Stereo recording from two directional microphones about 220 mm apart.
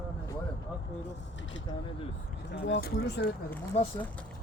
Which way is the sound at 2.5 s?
55° left (ahead or behind).